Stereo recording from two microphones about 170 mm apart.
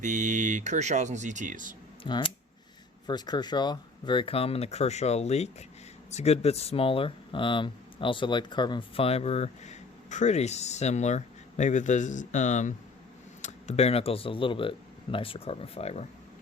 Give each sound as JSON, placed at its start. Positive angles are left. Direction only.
{"t": 0.0, "sound": "speech", "side_deg": -45}
{"t": 2.0, "sound": "speech", "side_deg": 25}